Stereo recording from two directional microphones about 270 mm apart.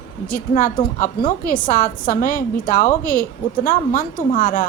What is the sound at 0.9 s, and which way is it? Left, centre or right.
A woman's voice, left.